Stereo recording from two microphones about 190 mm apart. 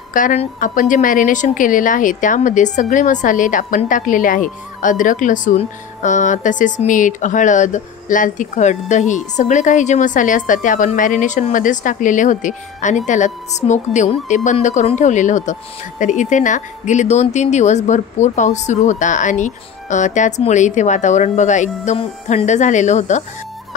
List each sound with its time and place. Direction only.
0.1 s a woman's voice: 40° left (ahead or behind)